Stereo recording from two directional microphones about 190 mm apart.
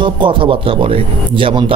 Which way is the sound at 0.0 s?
25° right (ahead or behind).